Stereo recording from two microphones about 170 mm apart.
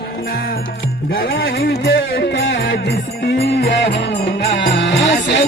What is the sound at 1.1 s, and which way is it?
Music, 60° left (ahead or behind).